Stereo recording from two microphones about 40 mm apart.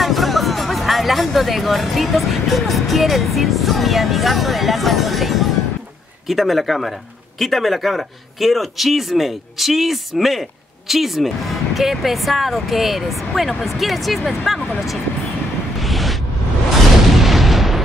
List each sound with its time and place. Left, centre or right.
0.0 s speech: centre
15.8 s a sound: centre
17.1 s artillery fire: centre